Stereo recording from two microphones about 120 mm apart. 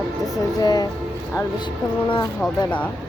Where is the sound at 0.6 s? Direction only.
35° left (ahead or behind).